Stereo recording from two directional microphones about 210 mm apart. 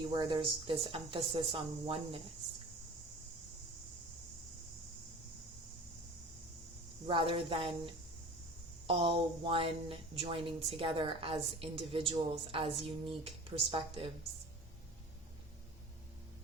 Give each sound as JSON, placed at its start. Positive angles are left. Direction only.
{"t": 0.1, "sound": "speech", "side_deg": -20}
{"t": 7.1, "sound": "speech", "side_deg": -25}
{"t": 8.9, "sound": "speech", "side_deg": -25}